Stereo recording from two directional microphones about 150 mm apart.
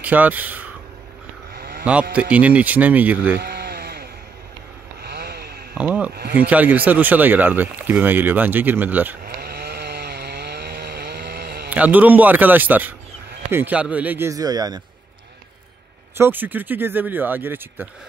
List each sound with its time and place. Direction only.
0.0 s speech: 10° right (ahead or behind)
1.5 s a sound: 90° right
2.3 s speech: 10° right (ahead or behind)
3.3 s sheep: 90° right
5.0 s a sound: 90° right
5.8 s speech: 10° right (ahead or behind)
9.2 s chainsaw: 90° right
11.7 s speech: 10° right (ahead or behind); by 14.8 s 25° right (ahead or behind)
16.2 s speech: 15° right (ahead or behind)